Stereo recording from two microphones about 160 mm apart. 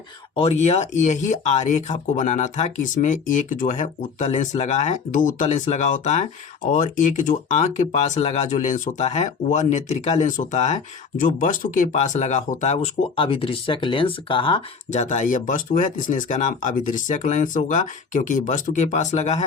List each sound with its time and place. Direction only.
0.3 s speech: 40° left (ahead or behind)
14.8 s speech: 50° left (ahead or behind)